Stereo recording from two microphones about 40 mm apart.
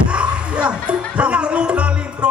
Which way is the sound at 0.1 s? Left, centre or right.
Right.